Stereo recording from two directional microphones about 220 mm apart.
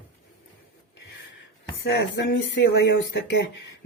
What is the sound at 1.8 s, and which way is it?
Speech, 55° left (ahead or behind).